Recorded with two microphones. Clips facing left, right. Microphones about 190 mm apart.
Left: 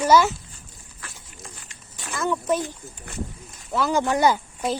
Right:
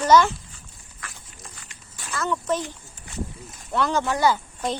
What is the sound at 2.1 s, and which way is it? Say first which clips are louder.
Speech: left 2 dB; 10° left (ahead or behind).